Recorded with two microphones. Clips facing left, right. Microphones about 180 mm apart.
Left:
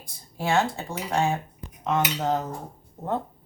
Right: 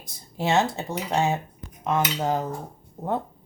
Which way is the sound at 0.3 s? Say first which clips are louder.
Right 1 dB; 20° right (ahead or behind).